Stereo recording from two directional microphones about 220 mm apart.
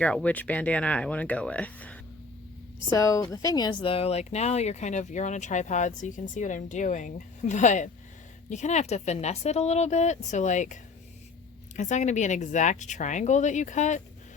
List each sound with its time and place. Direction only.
0.0 s speech: 5° left (ahead or behind); by 10.8 s 35° left (ahead or behind)
11.8 s speech: 35° left (ahead or behind)